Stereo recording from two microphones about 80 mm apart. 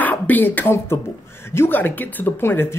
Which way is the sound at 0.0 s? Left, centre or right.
Left.